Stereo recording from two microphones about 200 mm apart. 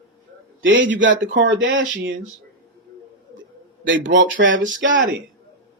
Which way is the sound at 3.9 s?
70° right (ahead or behind).